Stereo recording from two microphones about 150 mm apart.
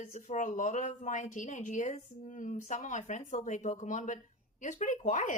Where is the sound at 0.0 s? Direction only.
50° left (ahead or behind).